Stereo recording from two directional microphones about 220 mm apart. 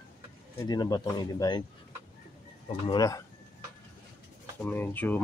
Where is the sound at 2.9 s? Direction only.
15° left (ahead or behind).